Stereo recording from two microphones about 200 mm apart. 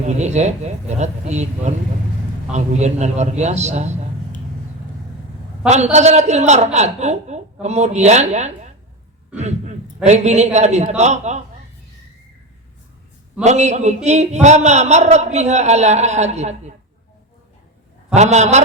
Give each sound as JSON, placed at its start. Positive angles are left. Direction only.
{"t": 0.0, "sound": "a man's voice", "side_deg": -35}
{"t": 5.6, "sound": "a man's voice", "side_deg": -35}
{"t": 13.4, "sound": "a man's voice", "side_deg": -35}
{"t": 18.1, "sound": "a man's voice", "side_deg": -35}